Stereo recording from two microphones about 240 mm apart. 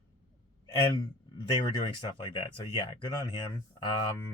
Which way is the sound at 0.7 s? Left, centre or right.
Centre.